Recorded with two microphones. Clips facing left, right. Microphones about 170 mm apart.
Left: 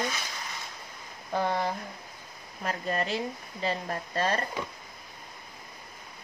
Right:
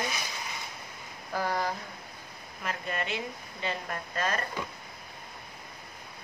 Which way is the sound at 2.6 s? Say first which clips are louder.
Left 4 dB; 35° left (ahead or behind).